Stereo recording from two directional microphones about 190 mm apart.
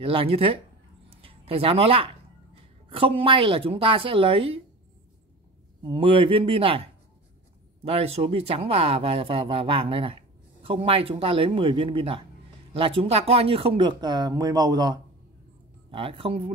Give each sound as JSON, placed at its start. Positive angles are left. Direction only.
{"t": 0.0, "sound": "speech", "side_deg": -30}
{"t": 5.8, "sound": "speech", "side_deg": -25}
{"t": 7.8, "sound": "speech", "side_deg": -30}